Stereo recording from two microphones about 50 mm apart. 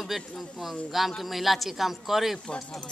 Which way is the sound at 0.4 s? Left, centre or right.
Centre.